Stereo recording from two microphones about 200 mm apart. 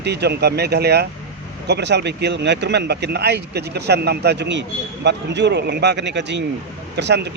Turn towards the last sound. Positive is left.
turn(degrees=-60)  # may be behind; listen again after turning